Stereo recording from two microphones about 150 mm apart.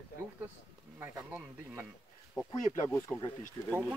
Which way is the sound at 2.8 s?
20° left (ahead or behind).